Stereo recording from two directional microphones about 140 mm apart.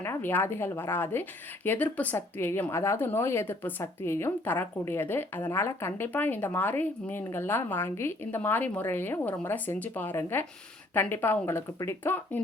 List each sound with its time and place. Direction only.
0.0 s speech: 15° left (ahead or behind)